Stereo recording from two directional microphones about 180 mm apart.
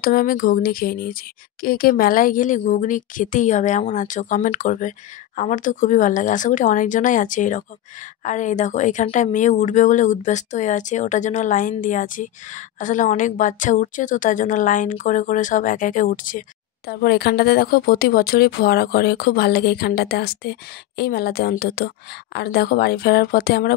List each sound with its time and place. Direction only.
0.0 s a woman's voice: 55° left (ahead or behind)